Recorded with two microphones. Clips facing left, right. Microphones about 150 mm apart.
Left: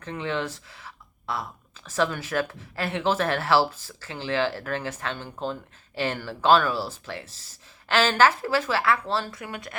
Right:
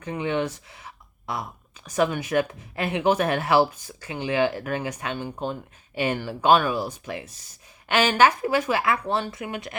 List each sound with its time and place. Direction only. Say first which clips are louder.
0.0 s speech: right 3 dB; 15° right (ahead or behind)